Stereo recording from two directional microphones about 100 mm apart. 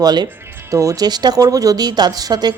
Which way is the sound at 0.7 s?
35° right (ahead or behind).